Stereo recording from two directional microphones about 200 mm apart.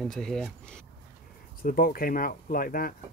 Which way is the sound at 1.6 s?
45° left (ahead or behind).